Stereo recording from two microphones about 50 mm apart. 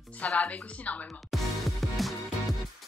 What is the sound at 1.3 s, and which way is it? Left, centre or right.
Music, centre.